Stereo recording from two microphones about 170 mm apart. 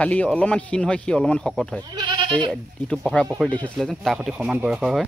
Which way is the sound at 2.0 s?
25° right (ahead or behind).